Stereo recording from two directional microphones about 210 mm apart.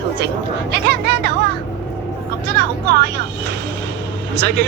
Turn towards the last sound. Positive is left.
turn(degrees=-55)  # may be behind; listen again after turning